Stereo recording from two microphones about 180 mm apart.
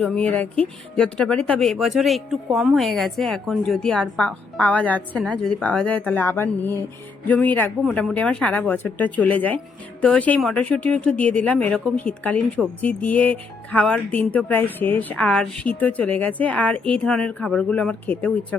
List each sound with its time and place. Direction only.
0.0 s speech: 10° left (ahead or behind)